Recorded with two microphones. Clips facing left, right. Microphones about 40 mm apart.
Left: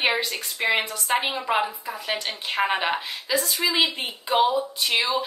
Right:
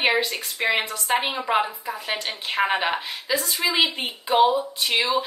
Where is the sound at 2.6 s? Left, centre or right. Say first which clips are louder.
Right 1 dB; centre.